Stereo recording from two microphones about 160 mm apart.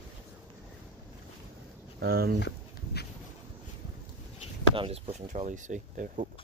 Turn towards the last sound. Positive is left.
turn(degrees=-50)  # may be behind; listen again after turning